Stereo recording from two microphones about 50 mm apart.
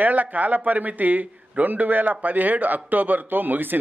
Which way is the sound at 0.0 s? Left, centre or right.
Right.